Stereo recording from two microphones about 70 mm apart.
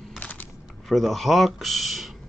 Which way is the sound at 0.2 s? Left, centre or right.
Left.